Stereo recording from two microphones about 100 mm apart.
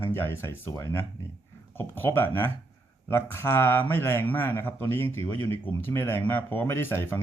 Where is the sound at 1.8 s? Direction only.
20° left (ahead or behind).